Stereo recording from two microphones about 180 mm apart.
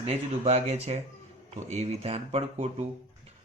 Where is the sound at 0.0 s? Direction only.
35° right (ahead or behind).